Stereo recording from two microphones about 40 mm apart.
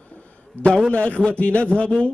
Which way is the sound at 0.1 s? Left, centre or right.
Left.